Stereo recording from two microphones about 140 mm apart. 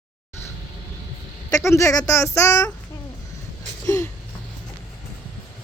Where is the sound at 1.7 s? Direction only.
20° left (ahead or behind).